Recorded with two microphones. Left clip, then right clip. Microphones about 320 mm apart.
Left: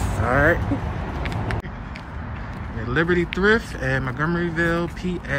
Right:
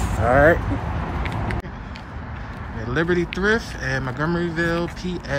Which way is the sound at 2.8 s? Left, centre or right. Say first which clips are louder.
Left 1 dB; centre.